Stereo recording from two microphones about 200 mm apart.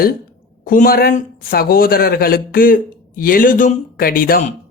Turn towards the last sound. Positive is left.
turn(degrees=45)  # may be behind; listen again after turning